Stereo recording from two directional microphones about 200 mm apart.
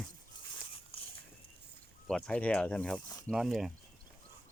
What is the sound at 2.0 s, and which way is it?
Speech, 5° left (ahead or behind).